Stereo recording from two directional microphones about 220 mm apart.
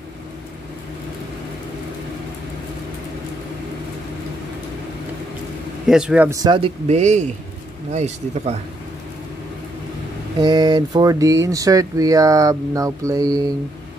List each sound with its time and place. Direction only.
5.9 s a man's voice: 5° right (ahead or behind); by 8.5 s 30° right (ahead or behind)
10.4 s speech: 20° right (ahead or behind)